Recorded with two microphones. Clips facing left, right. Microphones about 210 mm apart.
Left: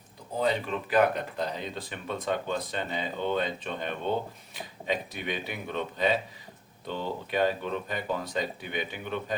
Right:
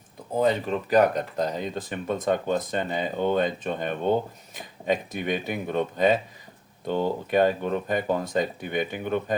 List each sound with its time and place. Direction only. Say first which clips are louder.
0.3 s speech: right 5 dB; 45° right (ahead or behind)